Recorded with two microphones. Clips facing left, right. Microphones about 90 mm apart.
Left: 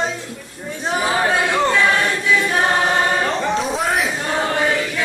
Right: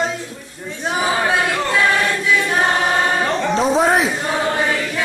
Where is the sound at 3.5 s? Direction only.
30° right (ahead or behind).